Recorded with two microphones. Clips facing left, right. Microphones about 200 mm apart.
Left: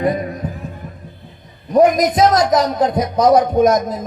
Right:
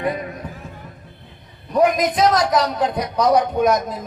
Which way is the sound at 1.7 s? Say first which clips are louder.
Left 5 dB; 45° left (ahead or behind).